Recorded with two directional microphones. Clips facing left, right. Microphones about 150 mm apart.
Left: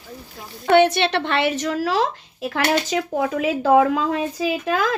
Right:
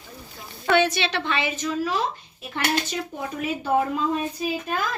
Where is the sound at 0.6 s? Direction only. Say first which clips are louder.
Left 6 dB; 60° left (ahead or behind).